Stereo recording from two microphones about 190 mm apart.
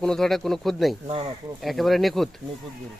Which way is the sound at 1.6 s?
Centre (ahead or behind).